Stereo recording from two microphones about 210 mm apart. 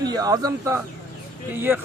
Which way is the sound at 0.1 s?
15° right (ahead or behind).